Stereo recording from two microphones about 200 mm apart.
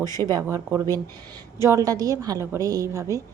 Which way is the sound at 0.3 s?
15° right (ahead or behind).